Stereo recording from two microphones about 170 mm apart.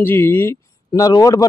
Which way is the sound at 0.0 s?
15° left (ahead or behind).